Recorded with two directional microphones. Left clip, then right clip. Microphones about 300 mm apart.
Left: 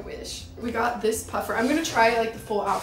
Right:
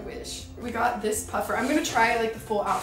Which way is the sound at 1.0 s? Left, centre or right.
Centre.